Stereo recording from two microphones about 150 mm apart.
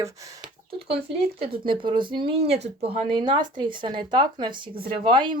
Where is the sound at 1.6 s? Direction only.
30° right (ahead or behind).